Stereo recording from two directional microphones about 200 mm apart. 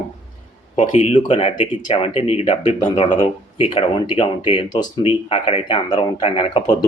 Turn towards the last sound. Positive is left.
turn(degrees=25)  # may be behind; listen again after turning